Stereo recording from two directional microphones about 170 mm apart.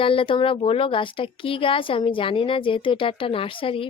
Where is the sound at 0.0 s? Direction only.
30° left (ahead or behind).